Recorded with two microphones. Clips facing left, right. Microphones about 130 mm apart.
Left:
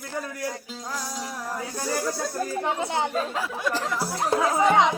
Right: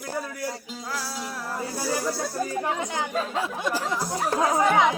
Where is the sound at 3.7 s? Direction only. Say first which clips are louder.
Left 1 dB; 10° right (ahead or behind).